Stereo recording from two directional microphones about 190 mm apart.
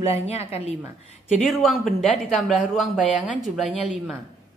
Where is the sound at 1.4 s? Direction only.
Centre (ahead or behind).